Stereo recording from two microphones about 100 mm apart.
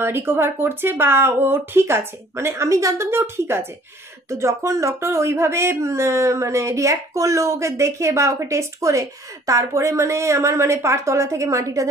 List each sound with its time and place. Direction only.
0.0 s a woman's voice: 25° right (ahead or behind)